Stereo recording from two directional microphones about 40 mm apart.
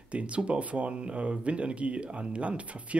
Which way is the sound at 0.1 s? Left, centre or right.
Right.